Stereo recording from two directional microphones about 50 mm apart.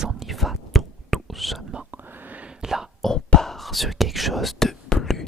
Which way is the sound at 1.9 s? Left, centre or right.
Right.